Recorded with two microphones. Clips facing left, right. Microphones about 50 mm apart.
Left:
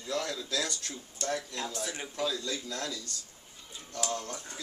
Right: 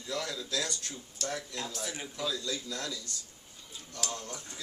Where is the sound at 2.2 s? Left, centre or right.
Left.